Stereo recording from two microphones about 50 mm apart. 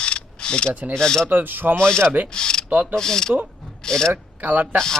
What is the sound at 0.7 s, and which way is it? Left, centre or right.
Speech, right.